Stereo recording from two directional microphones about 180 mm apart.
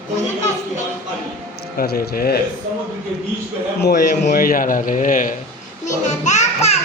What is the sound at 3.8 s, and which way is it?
A man's voice, 50° left (ahead or behind).